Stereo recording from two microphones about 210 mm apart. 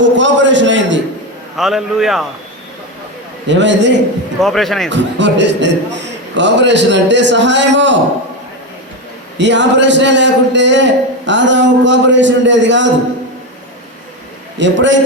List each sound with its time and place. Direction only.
0.0 s a sound: 60° right (ahead or behind)
1.5 s a man's voice: centre (ahead or behind)
3.4 s speech: 60° right (ahead or behind)
4.4 s a man's voice: centre (ahead or behind)
4.9 s speech: 55° right (ahead or behind)
9.4 s speech: 60° right (ahead or behind)
14.6 s speech: 60° right (ahead or behind)